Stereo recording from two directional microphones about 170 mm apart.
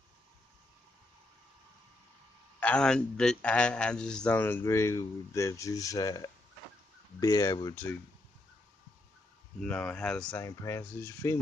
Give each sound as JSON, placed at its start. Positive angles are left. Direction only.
{"t": 2.6, "sound": "a man's voice", "side_deg": 5}
{"t": 7.7, "sound": "a man's voice", "side_deg": 10}
{"t": 9.6, "sound": "speech", "side_deg": 10}
{"t": 10.4, "sound": "a man's voice", "side_deg": 20}